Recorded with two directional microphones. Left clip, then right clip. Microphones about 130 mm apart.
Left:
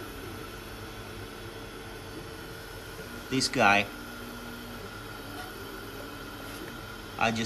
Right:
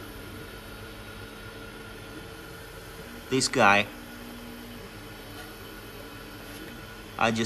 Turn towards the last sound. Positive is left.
turn(degrees=5)  # may be behind; listen again after turning